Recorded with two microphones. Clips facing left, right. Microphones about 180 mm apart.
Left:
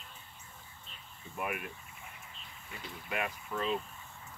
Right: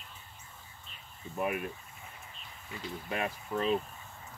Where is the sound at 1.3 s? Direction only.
30° right (ahead or behind).